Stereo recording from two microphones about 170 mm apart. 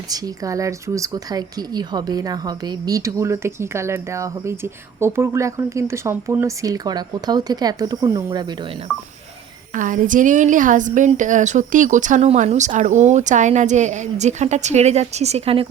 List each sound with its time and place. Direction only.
0.1 s speech: 20° right (ahead or behind)
9.7 s a woman's voice: 50° right (ahead or behind)